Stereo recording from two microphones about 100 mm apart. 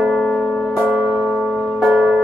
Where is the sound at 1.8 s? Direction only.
Centre (ahead or behind).